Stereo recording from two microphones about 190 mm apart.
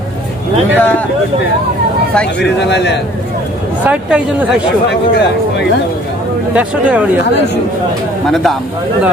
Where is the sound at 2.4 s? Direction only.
65° left (ahead or behind).